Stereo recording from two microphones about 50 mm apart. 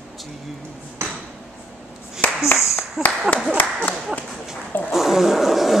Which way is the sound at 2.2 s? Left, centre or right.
Left.